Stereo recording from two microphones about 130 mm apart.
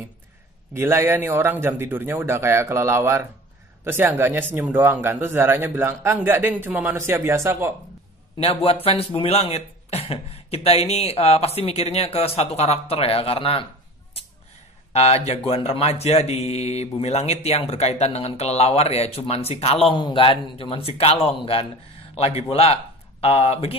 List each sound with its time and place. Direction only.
0.7 s a man's voice: 20° right (ahead or behind)
8.4 s speech: 50° left (ahead or behind)
14.9 s speech: 55° left (ahead or behind)